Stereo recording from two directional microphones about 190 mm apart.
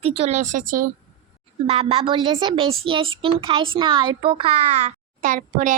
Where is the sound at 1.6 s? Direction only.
30° right (ahead or behind).